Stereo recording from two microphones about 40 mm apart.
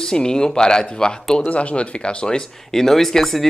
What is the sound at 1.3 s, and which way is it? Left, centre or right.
Speech, left.